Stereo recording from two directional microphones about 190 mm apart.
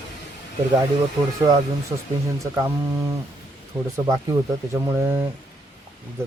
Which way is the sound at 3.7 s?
5° right (ahead or behind).